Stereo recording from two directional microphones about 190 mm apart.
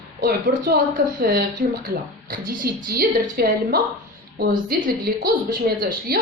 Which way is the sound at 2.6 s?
50° right (ahead or behind).